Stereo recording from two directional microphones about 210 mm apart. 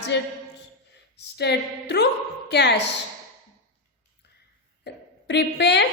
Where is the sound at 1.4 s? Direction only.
50° left (ahead or behind).